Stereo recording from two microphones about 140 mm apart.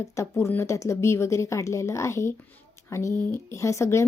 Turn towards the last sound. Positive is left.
turn(degrees=20)  # may be behind; listen again after turning